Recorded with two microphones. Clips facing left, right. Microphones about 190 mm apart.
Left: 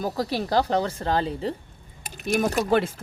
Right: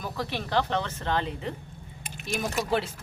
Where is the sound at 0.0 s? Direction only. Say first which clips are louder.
Left 6 dB; 35° left (ahead or behind).